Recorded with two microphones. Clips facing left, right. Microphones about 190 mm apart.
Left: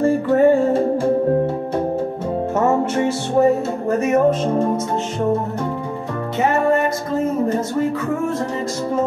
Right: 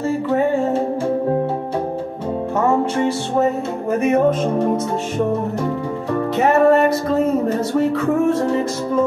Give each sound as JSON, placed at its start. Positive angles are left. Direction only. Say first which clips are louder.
{"t": 0.0, "sound": "music", "louder": "left 4 dB", "side_deg": 50}